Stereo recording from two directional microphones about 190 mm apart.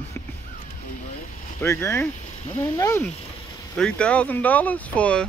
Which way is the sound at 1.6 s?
15° left (ahead or behind).